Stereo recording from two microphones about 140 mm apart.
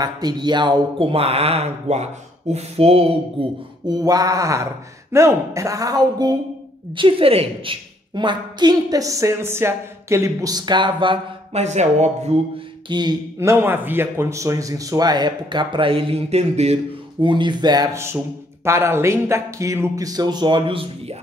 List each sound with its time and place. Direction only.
0.0 s speech: 30° right (ahead or behind)
3.8 s speech: 30° right (ahead or behind)
11.5 s speech: 55° right (ahead or behind)
12.8 s speech: 35° right (ahead or behind)
13.4 s speech: 15° right (ahead or behind)
17.9 s speech: 20° right (ahead or behind); by 21.2 s 40° right (ahead or behind)